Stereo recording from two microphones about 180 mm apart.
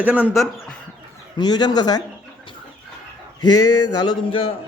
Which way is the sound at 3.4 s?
20° left (ahead or behind).